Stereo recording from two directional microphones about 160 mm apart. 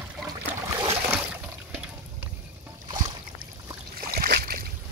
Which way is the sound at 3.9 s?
65° right (ahead or behind).